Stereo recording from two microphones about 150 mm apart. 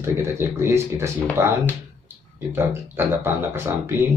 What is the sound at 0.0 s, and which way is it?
Speech, 15° right (ahead or behind).